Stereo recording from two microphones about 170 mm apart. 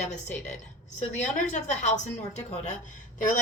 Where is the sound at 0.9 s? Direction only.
45° left (ahead or behind).